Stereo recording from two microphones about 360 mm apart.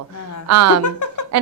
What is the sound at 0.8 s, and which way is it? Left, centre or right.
Speech, left.